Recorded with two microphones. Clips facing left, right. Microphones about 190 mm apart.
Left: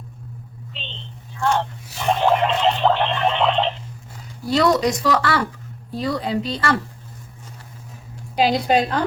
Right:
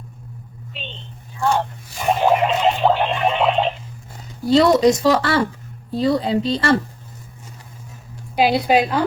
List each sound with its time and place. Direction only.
1.4 s speech: 15° right (ahead or behind)
2.0 s a sound: 10° right (ahead or behind)
4.4 s speech: 25° right (ahead or behind)
8.4 s a woman's voice: 10° right (ahead or behind)